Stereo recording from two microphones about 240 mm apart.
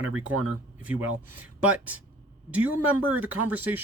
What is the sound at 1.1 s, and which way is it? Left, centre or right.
Speech, right.